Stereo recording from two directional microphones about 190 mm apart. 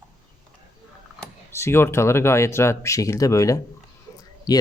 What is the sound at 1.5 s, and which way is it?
Speech, 15° left (ahead or behind).